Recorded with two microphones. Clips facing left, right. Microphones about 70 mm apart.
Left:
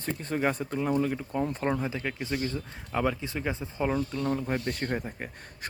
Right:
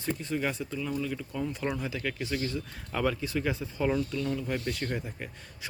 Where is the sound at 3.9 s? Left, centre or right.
Left.